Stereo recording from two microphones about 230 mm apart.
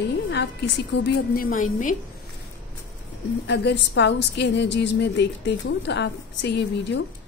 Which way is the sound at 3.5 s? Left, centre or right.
Left.